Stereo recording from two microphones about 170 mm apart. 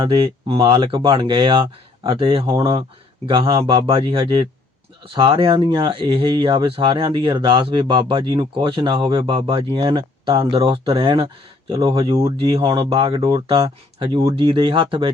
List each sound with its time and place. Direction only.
0.0 s speech: 30° right (ahead or behind)